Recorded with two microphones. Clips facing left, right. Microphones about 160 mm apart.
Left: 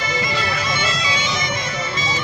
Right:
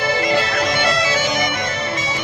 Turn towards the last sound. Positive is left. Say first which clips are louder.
# right 5 dB
turn(degrees=-60)  # may be behind; listen again after turning